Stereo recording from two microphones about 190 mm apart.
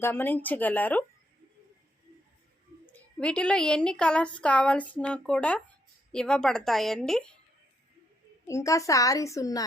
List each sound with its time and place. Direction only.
0.0 s a woman's voice: 10° left (ahead or behind)
2.9 s a woman's voice: 5° left (ahead or behind)
8.4 s a woman's voice: 15° left (ahead or behind)